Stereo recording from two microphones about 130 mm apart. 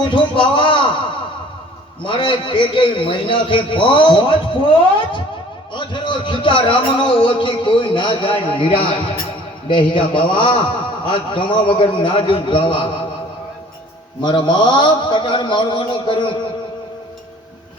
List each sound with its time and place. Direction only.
0.0 s speech: 40° left (ahead or behind)
2.0 s speech: 40° left (ahead or behind)
14.2 s speech: 35° left (ahead or behind)